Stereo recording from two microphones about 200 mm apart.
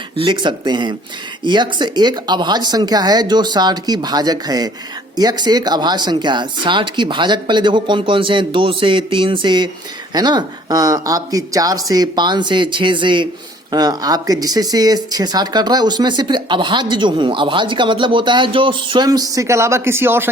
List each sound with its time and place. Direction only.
0.2 s speech: 25° right (ahead or behind)